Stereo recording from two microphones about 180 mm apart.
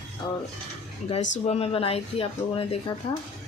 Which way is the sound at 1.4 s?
35° left (ahead or behind).